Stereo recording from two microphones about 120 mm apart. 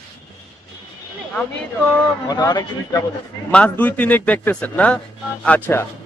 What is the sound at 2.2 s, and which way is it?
Speech, 35° left (ahead or behind).